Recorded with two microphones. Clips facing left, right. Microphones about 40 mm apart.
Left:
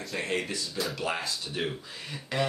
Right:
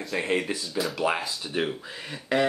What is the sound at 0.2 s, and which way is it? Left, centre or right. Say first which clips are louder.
Speech: right 4 dB; centre.